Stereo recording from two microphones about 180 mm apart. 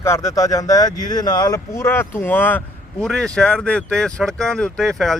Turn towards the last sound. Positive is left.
turn(degrees=0)  # may be behind; listen again after turning